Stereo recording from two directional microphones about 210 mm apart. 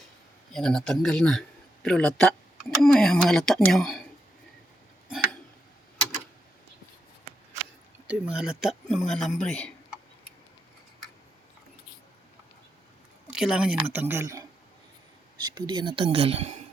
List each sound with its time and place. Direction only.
0.5 s a man's voice: centre (ahead or behind)
8.0 s a man's voice: 5° right (ahead or behind)
13.3 s speech: 5° right (ahead or behind); by 16.6 s 25° right (ahead or behind)